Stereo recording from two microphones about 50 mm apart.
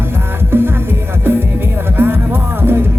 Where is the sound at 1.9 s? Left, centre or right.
Right.